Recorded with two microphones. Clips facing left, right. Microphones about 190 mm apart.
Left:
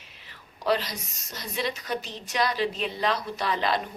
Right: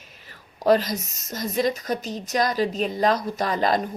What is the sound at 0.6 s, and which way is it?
A woman's voice, 45° right (ahead or behind).